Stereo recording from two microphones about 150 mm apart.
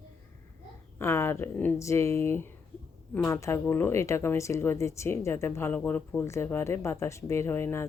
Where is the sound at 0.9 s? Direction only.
15° left (ahead or behind).